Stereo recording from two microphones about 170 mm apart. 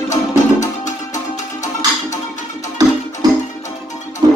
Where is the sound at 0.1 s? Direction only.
45° left (ahead or behind).